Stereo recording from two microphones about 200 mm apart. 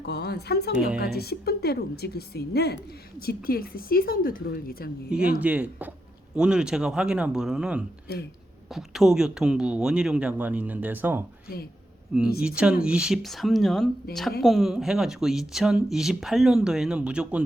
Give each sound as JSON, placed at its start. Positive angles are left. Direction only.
{"t": 0.0, "sound": "a woman's voice", "side_deg": 55}
{"t": 5.0, "sound": "speech", "side_deg": -5}
{"t": 8.1, "sound": "a woman's voice", "side_deg": 55}
{"t": 8.7, "sound": "speech", "side_deg": 0}
{"t": 12.4, "sound": "speech", "side_deg": -5}